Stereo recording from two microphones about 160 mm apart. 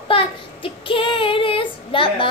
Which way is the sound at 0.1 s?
35° left (ahead or behind).